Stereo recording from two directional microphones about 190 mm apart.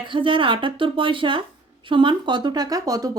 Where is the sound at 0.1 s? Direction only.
25° right (ahead or behind).